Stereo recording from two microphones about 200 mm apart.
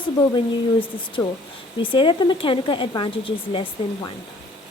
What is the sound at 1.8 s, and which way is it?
Speech, 25° left (ahead or behind).